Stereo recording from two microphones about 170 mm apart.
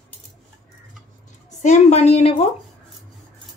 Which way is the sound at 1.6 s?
40° left (ahead or behind).